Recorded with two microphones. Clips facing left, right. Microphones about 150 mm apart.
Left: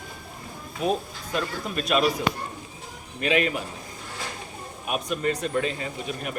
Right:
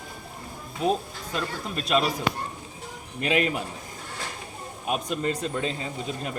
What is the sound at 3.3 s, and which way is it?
Speech, 30° right (ahead or behind).